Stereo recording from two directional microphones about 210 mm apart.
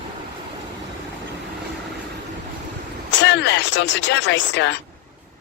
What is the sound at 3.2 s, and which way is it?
Speech, 55° left (ahead or behind).